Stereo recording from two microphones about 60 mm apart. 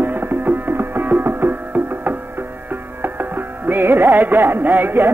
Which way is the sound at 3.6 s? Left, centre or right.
Right.